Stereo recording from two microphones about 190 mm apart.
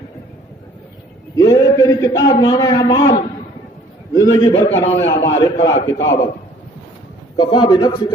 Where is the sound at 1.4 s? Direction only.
20° left (ahead or behind).